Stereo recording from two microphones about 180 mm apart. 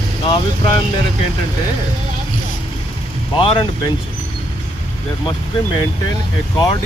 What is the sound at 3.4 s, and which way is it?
Speech, 30° left (ahead or behind).